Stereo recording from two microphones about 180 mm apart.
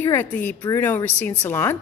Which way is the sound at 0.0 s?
10° left (ahead or behind).